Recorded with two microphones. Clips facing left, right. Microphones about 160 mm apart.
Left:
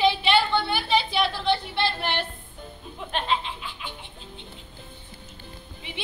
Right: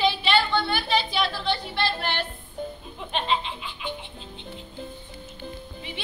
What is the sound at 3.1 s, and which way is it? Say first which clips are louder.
Laughter: right 1 dB; 5° left (ahead or behind).